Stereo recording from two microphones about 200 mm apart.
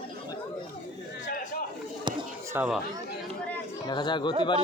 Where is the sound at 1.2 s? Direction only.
40° left (ahead or behind).